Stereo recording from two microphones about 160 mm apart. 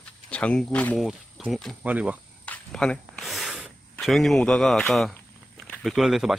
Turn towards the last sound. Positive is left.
turn(degrees=0)  # may be behind; listen again after turning